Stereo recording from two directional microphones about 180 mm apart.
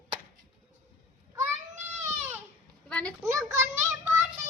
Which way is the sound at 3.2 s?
15° right (ahead or behind).